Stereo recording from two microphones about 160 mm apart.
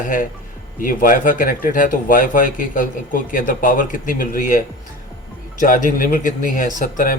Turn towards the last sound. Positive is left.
turn(degrees=55)  # may be behind; listen again after turning